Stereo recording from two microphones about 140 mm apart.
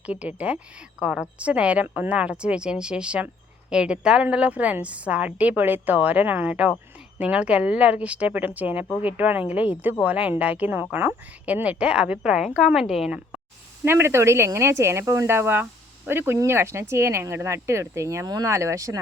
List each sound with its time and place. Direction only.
0.0 s a woman's voice: 10° right (ahead or behind)
13.8 s speech: 15° right (ahead or behind)